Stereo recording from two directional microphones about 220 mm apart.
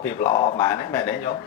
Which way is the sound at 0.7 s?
10° left (ahead or behind).